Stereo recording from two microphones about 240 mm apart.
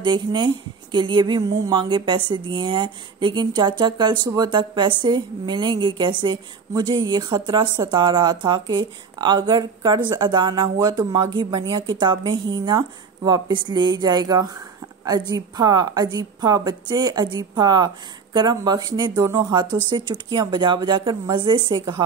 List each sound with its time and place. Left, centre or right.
0.0 s a woman's voice: centre